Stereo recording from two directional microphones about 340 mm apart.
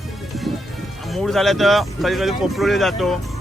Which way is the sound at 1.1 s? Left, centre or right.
Centre.